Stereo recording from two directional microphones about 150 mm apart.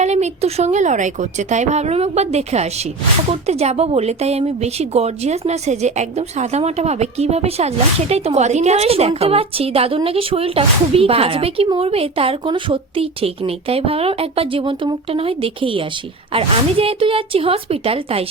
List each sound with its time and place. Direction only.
0.0 s a woman's voice: 50° right (ahead or behind)